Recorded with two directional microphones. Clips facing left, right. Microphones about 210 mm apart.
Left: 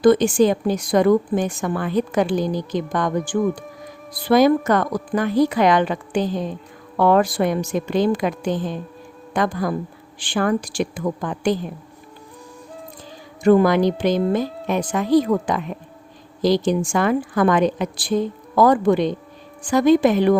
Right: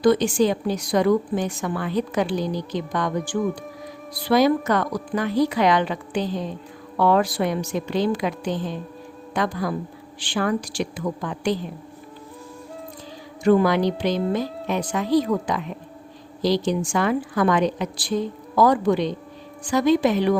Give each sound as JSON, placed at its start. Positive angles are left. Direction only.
{"t": 0.0, "sound": "a woman's voice", "side_deg": 50}
{"t": 13.4, "sound": "a woman's voice", "side_deg": 50}